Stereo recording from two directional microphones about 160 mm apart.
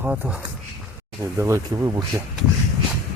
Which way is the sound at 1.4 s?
20° right (ahead or behind).